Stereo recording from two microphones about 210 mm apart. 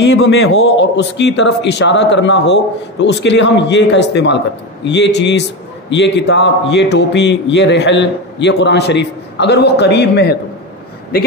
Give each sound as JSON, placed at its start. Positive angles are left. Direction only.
{"t": 0.0, "sound": "a man's voice", "side_deg": 55}